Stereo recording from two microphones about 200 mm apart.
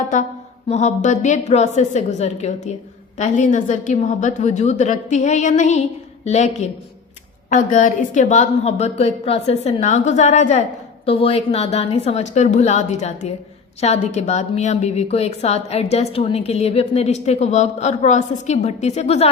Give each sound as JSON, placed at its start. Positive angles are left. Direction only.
{"t": 0.7, "sound": "a woman's voice", "side_deg": 35}